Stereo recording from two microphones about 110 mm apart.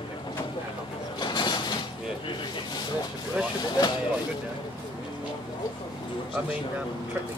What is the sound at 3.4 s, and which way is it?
Vehicle, 10° right (ahead or behind).